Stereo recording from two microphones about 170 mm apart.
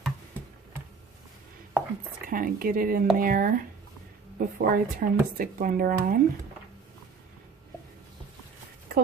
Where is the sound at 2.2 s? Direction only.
55° right (ahead or behind).